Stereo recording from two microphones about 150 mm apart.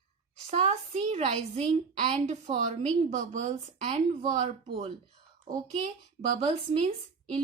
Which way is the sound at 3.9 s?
40° right (ahead or behind).